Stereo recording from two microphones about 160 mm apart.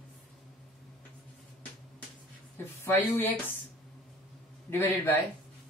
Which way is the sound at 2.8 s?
10° left (ahead or behind).